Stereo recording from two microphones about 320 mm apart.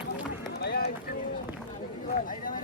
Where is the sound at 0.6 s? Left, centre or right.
Left.